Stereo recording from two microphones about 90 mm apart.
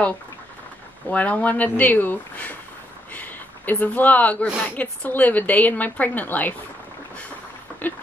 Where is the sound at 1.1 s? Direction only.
15° left (ahead or behind).